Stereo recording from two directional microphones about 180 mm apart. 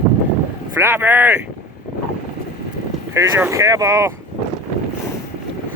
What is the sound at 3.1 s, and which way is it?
Speech, 15° right (ahead or behind).